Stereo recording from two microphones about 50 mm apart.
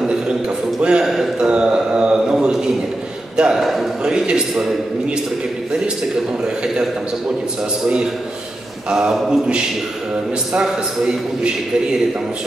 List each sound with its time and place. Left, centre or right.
0.7 s a man's voice: centre
1.5 s a sound: right
3.3 s a man's voice: centre
3.6 s a man's voice: centre
4.0 s a man's voice: centre
6.4 s a man's voice: centre
8.9 s a man's voice: centre